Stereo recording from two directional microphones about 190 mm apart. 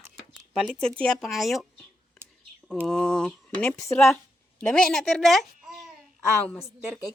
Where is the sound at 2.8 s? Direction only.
5° left (ahead or behind).